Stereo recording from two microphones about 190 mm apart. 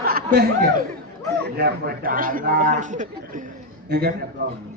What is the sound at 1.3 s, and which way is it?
A man's voice, 55° right (ahead or behind).